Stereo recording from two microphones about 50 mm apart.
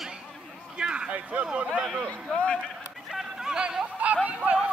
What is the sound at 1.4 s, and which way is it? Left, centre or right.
Speech, centre.